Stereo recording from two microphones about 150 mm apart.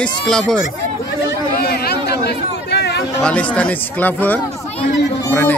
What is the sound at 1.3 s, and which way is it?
Chatter, 90° left.